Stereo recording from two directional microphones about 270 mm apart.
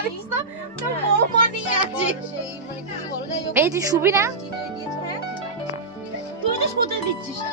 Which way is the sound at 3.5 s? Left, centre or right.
Centre.